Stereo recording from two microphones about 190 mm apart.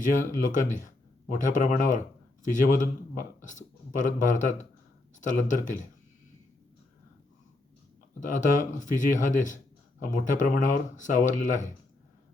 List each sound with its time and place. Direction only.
0.0 s speech: 45° left (ahead or behind)
8.2 s speech: 45° left (ahead or behind)